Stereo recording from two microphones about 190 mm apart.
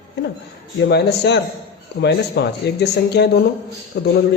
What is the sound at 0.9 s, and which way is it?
Speech, 60° left (ahead or behind).